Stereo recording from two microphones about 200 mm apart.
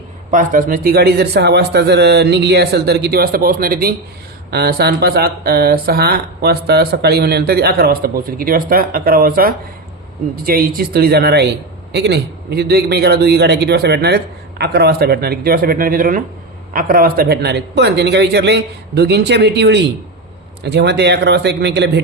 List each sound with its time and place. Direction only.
0.3 s speech: 40° right (ahead or behind); by 22.0 s 60° right (ahead or behind)